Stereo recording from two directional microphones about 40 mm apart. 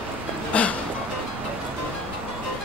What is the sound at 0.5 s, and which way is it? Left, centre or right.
Music, left.